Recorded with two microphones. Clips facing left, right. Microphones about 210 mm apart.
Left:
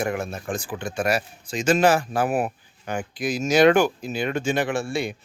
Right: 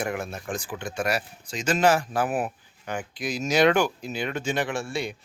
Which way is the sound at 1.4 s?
10° left (ahead or behind).